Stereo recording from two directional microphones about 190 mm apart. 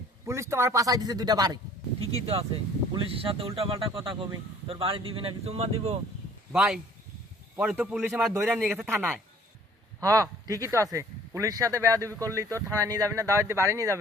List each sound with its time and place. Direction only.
0.3 s speech: 15° right (ahead or behind)
2.0 s speech: 30° right (ahead or behind)
6.5 s speech: 5° right (ahead or behind)